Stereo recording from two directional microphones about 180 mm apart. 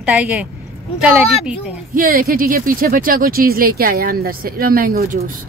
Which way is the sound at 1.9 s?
50° right (ahead or behind).